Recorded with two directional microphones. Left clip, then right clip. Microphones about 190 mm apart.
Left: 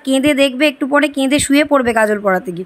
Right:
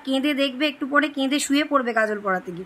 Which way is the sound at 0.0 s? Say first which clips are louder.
Left 10 dB; 40° left (ahead or behind).